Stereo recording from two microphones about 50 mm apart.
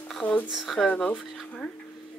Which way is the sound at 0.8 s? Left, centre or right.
Centre.